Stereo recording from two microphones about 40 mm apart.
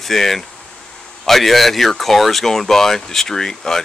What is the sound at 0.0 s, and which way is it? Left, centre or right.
Speech, centre.